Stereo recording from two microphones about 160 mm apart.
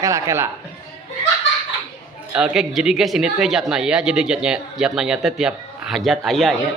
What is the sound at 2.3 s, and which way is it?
Speech, 5° right (ahead or behind).